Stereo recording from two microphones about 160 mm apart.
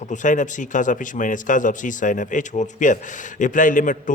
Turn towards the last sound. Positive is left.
turn(degrees=55)  # may be behind; listen again after turning